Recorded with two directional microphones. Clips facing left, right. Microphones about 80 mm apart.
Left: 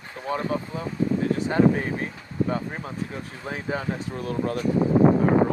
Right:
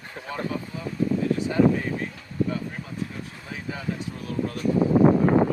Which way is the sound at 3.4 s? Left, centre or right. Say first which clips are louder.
Left 7 dB; left.